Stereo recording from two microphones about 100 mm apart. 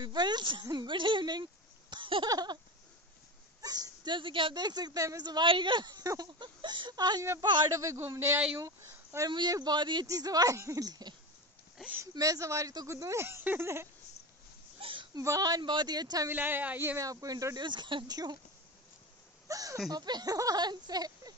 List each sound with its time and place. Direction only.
0.0 s speech: 45° right (ahead or behind)
2.2 s speech: 40° right (ahead or behind)
3.6 s speech: 40° right (ahead or behind); by 4.6 s 60° right (ahead or behind)
4.6 s speech: 45° right (ahead or behind)
7.7 s speech: 30° right (ahead or behind)
9.3 s speech: 45° right (ahead or behind)
10.0 s speech: 40° right (ahead or behind)
14.8 s a sound: 60° right (ahead or behind)
15.1 s speech: 35° right (ahead or behind)
16.3 s speech: 20° right (ahead or behind)
17.0 s speech: 35° right (ahead or behind)
17.6 s speech: 50° right (ahead or behind)
19.4 s a sound: 35° right (ahead or behind)
19.9 s speech: 45° right (ahead or behind)